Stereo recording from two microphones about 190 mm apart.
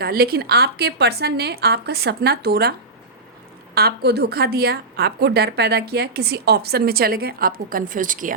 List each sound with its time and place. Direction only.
0.0 s a woman's voice: 55° right (ahead or behind)
3.8 s a woman's voice: 55° right (ahead or behind)